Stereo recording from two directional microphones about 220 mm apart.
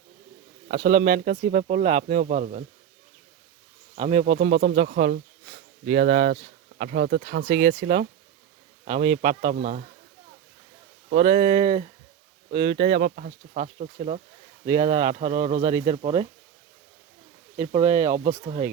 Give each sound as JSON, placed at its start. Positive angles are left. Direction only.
{"t": 0.7, "sound": "speech", "side_deg": -35}
{"t": 3.9, "sound": "speech", "side_deg": -30}
{"t": 4.3, "sound": "a man's voice", "side_deg": -40}
{"t": 9.6, "sound": "speech", "side_deg": -45}
{"t": 11.2, "sound": "a man's voice", "side_deg": -25}
{"t": 11.5, "sound": "speech", "side_deg": -35}
{"t": 12.5, "sound": "a man's voice", "side_deg": -20}
{"t": 13.1, "sound": "speech", "side_deg": -40}
{"t": 14.8, "sound": "a man's voice", "side_deg": -20}
{"t": 15.4, "sound": "speech", "side_deg": -35}
{"t": 16.0, "sound": "a man's voice", "side_deg": -25}
{"t": 17.6, "sound": "a man's voice", "side_deg": -30}